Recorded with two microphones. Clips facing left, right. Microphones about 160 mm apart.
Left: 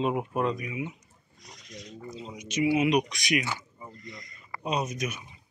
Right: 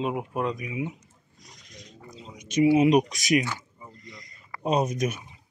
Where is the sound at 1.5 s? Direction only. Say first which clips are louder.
Left 6 dB; 45° right (ahead or behind).